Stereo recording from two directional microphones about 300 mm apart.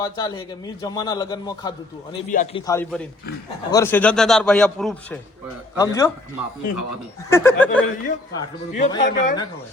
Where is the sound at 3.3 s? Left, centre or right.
Left.